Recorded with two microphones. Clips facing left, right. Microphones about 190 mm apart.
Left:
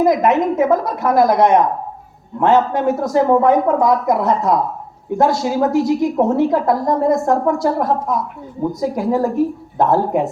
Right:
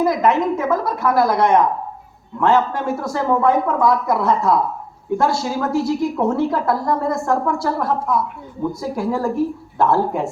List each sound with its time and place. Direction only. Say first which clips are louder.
0.0 s speech: left 3 dB; 20° left (ahead or behind)
7.9 s a woman's voice: even; 40° left (ahead or behind)
8.8 s speech: left 5 dB; 20° left (ahead or behind)